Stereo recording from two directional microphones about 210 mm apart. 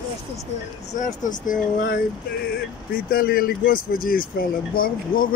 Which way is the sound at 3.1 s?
45° left (ahead or behind).